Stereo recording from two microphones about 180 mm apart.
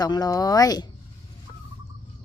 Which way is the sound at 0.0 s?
20° left (ahead or behind).